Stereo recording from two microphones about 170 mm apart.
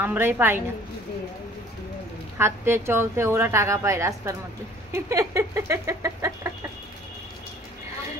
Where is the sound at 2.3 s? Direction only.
15° right (ahead or behind).